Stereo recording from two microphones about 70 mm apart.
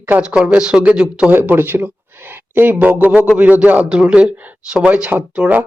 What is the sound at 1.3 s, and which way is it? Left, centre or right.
A man's voice, right.